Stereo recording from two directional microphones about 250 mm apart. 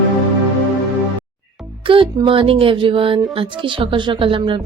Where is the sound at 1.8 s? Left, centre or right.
Centre.